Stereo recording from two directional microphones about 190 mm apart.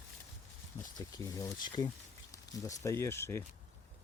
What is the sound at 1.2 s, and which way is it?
Speech, 20° left (ahead or behind).